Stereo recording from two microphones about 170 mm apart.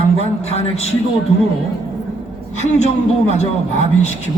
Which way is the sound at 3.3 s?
40° left (ahead or behind).